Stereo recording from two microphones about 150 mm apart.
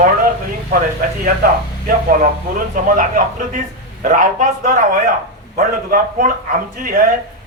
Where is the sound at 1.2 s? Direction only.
70° right (ahead or behind).